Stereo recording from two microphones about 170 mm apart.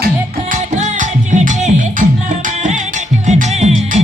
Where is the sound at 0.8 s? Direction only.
45° right (ahead or behind).